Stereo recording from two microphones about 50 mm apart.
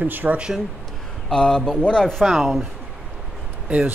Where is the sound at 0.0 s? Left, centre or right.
Right.